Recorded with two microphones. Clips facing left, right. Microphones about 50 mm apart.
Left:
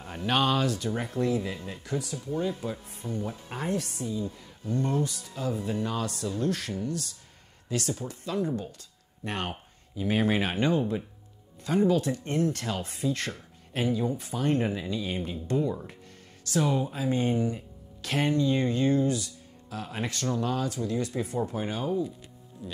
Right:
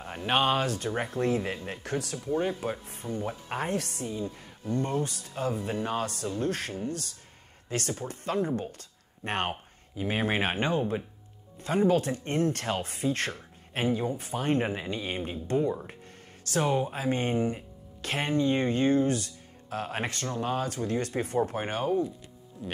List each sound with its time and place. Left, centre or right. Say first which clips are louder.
0.2 s speech: even; right
2.3 s speech: right 2 dB; right
3.1 s speech: right 1 dB; right
3.8 s speech: left 1 dB; right
10.0 s speech: left 2 dB; right